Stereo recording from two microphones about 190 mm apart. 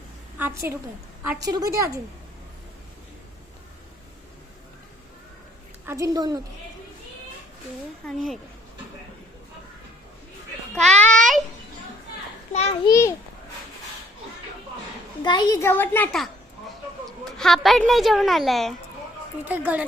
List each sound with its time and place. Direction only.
0.3 s a woman's voice: 15° right (ahead or behind)
5.8 s a woman's voice: 15° right (ahead or behind)
8.0 s a woman's voice: centre (ahead or behind)
10.8 s a child's voice: 5° left (ahead or behind)
12.5 s a child's voice: 35° left (ahead or behind)
12.9 s a child's voice: 15° left (ahead or behind)
15.2 s a child's voice: 25° left (ahead or behind); by 19.8 s 10° right (ahead or behind)